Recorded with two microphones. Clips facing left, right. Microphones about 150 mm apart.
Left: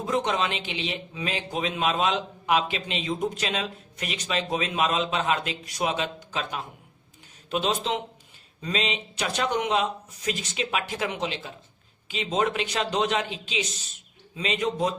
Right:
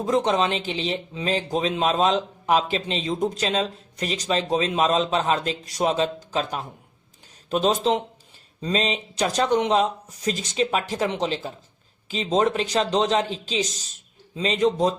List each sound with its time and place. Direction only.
0.0 s speech: 35° right (ahead or behind)